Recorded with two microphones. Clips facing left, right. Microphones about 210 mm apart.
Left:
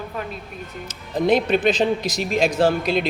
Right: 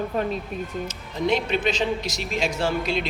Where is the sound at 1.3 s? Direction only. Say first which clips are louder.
Left 5 dB; 50° left (ahead or behind).